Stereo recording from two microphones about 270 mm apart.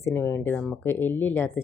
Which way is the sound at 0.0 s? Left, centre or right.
Centre.